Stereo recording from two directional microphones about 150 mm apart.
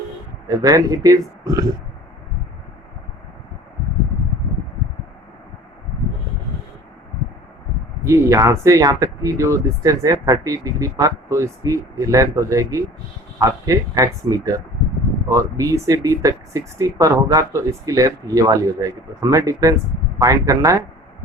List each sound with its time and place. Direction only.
0.4 s speech: 20° right (ahead or behind)
8.0 s speech: 20° right (ahead or behind)